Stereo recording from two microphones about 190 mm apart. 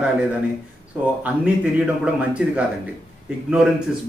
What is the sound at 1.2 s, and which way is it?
Speech, 5° right (ahead or behind).